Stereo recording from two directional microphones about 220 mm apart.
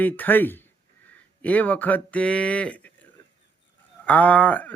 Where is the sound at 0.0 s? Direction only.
10° left (ahead or behind).